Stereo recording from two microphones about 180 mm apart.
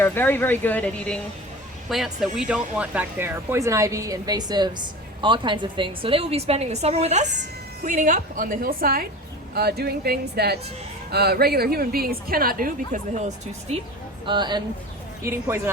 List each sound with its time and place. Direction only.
0.0 s a woman's voice: 10° left (ahead or behind); by 13.8 s 40° right (ahead or behind)
14.3 s speech: 25° right (ahead or behind)
15.2 s speech: 15° right (ahead or behind)